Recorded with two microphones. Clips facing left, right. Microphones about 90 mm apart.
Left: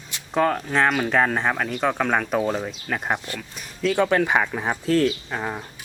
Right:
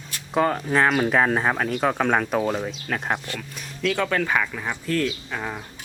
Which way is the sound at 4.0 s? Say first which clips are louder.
Left 5 dB; 15° left (ahead or behind).